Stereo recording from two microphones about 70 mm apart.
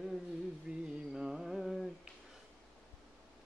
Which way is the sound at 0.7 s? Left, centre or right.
Centre.